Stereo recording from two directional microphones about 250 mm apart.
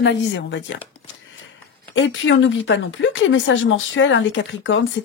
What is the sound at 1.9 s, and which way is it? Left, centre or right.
Speech, left.